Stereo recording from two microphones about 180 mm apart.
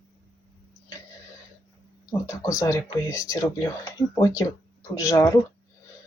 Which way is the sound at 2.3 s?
20° left (ahead or behind).